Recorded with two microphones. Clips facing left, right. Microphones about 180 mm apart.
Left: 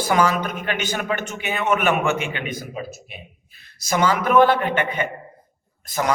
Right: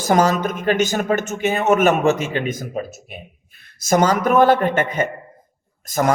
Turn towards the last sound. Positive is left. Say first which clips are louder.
# right 5 dB
turn(degrees=-45)  # may be behind; listen again after turning